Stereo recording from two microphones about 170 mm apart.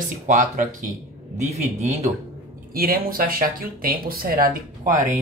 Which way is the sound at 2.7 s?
60° right (ahead or behind).